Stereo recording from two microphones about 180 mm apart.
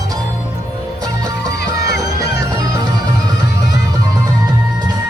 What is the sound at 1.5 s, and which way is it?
Music, 65° left (ahead or behind).